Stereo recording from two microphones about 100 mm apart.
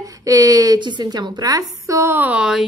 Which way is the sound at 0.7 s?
50° right (ahead or behind).